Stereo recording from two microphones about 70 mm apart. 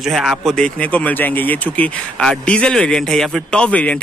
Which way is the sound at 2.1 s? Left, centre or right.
Centre.